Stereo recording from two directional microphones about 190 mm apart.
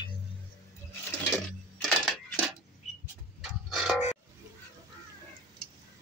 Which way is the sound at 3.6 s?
Centre (ahead or behind).